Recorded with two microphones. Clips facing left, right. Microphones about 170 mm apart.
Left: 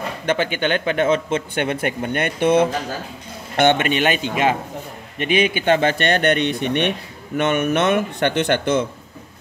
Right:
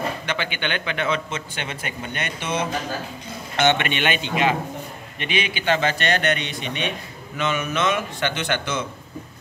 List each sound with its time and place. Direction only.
0.3 s a man's voice: 45° left (ahead or behind)